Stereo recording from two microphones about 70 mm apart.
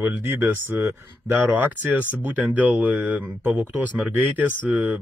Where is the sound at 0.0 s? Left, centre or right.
Right.